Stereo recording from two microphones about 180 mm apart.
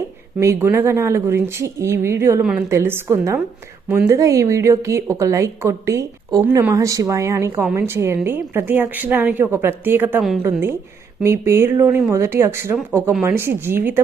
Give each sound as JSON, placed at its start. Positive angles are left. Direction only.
{"t": 0.3, "sound": "a woman's voice", "side_deg": -15}
{"t": 2.4, "sound": "a woman's voice", "side_deg": -5}